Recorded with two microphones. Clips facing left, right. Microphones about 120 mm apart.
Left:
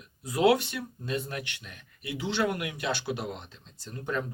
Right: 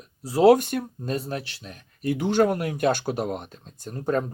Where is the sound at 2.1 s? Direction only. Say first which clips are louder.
Right 8 dB; 50° right (ahead or behind).